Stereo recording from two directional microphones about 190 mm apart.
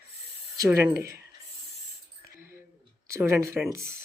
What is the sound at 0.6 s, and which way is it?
Speech, 10° right (ahead or behind).